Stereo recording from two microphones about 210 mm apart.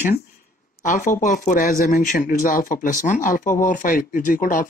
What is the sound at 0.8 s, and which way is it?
A woman's voice, 40° left (ahead or behind).